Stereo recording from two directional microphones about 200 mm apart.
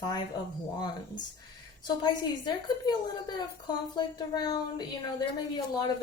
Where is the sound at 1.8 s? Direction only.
20° left (ahead or behind).